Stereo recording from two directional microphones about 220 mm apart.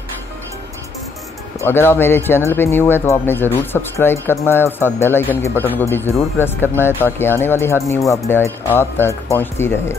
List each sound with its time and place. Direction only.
1.6 s speech: 10° left (ahead or behind)